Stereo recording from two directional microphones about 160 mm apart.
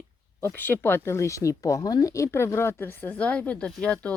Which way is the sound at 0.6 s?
15° left (ahead or behind).